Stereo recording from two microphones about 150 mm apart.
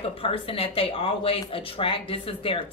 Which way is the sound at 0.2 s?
40° left (ahead or behind).